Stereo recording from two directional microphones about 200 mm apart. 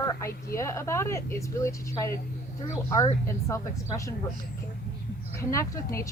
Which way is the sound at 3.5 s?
15° left (ahead or behind).